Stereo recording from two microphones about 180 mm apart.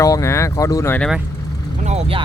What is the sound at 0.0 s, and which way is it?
Speech, 15° left (ahead or behind).